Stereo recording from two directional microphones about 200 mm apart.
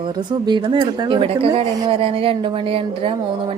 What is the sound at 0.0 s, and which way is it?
Speech, 20° right (ahead or behind).